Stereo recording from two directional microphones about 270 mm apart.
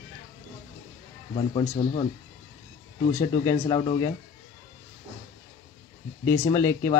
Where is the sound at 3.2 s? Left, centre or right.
Centre.